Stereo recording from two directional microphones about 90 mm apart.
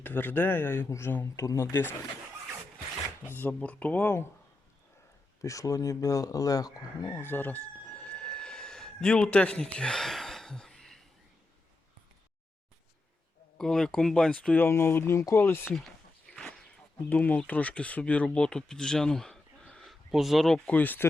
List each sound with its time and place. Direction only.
0.0 s speech: 20° left (ahead or behind)
1.7 s speech: 20° left (ahead or behind)
3.2 s speech: 20° left (ahead or behind)
5.4 s speech: 35° left (ahead or behind)
7.3 s a sound: 20° left (ahead or behind)
13.6 s speech: 5° left (ahead or behind)
14.6 s speech: 25° left (ahead or behind)
16.3 s a sound: 10° left (ahead or behind)
17.0 s speech: 20° left (ahead or behind); by 20.6 s centre (ahead or behind)
20.7 s speech: 20° left (ahead or behind)